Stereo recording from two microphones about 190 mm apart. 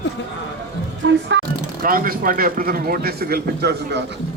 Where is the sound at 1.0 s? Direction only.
70° right (ahead or behind).